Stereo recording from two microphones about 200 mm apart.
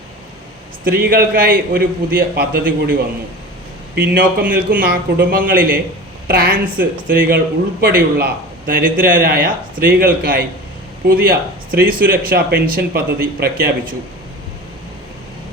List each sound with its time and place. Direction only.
0.9 s speech: 45° right (ahead or behind)
4.1 s speech: 45° right (ahead or behind)